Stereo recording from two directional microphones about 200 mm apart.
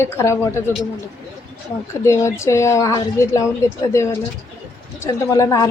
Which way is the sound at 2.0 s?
15° left (ahead or behind).